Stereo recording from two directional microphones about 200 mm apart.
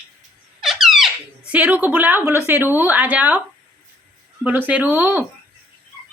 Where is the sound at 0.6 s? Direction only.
Centre (ahead or behind).